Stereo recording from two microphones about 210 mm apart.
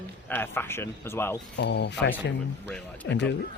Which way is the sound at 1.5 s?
55° left (ahead or behind).